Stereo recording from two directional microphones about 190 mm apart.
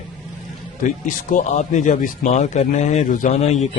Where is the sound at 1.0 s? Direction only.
40° left (ahead or behind).